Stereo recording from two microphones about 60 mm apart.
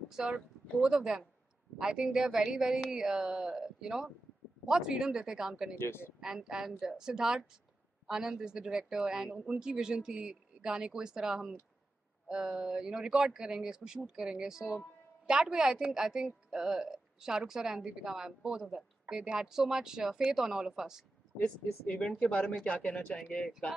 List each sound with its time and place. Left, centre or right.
0.1 s a woman's voice: centre
5.8 s speech: left
6.2 s a woman's voice: centre
21.8 s speech: left